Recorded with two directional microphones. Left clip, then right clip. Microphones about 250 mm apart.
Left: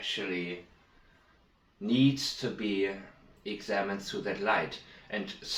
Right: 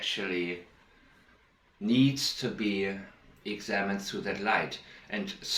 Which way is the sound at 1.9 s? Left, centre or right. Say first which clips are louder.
Right 1 dB; right.